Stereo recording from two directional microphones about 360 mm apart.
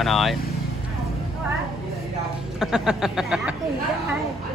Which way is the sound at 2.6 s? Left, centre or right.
Centre.